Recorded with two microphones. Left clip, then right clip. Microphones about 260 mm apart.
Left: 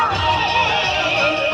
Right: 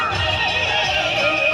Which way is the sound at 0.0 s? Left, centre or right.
Left.